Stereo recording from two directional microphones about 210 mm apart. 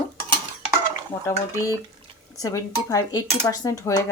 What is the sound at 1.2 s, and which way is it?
Speech, 15° left (ahead or behind).